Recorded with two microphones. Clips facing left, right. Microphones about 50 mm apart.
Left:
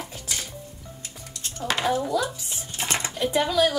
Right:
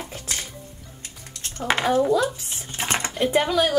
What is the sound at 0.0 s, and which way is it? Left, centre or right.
Music, right.